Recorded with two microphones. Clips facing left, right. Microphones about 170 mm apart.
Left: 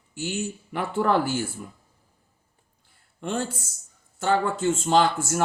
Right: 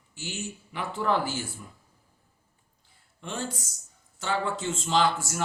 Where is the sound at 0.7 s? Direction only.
50° left (ahead or behind).